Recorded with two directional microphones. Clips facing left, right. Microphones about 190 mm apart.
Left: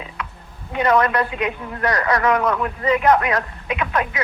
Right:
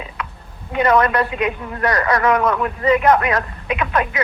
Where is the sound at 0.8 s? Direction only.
60° right (ahead or behind).